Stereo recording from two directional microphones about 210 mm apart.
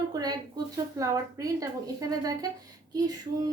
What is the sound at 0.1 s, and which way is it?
Speech, 20° right (ahead or behind).